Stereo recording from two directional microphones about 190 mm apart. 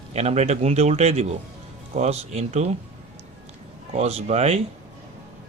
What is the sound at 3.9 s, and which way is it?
Speech, 35° right (ahead or behind).